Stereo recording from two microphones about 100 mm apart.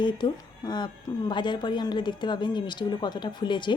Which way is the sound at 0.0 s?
50° left (ahead or behind).